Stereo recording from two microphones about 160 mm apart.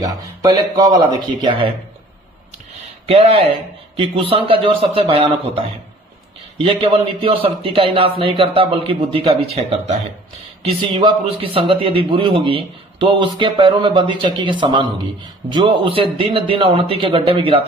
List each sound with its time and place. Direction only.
0.0 s speech: 25° right (ahead or behind)
3.1 s a man's voice: 40° right (ahead or behind)
10.9 s a man's voice: 35° right (ahead or behind)